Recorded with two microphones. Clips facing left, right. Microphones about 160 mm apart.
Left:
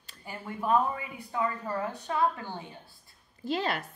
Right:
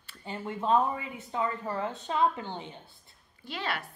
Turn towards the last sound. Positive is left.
turn(degrees=40)  # may be behind; listen again after turning